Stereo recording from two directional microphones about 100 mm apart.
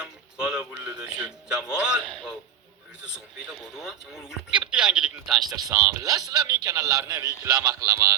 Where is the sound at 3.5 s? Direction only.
5° right (ahead or behind).